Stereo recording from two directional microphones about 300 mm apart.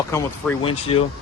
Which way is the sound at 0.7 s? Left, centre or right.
Centre.